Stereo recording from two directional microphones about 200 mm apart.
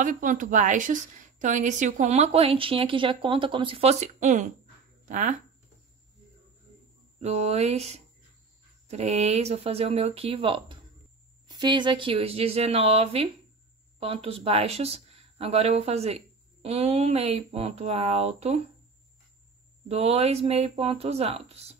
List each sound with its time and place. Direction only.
0.0 s a woman's voice: 40° right (ahead or behind)
7.2 s a woman's voice: 35° right (ahead or behind)
19.9 s a woman's voice: 30° right (ahead or behind)